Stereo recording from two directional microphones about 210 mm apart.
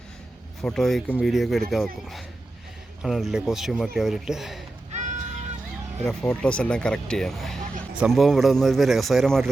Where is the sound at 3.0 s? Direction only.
Centre (ahead or behind).